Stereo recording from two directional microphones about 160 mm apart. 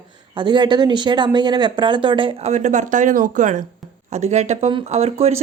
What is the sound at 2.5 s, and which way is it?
Speech, 50° right (ahead or behind).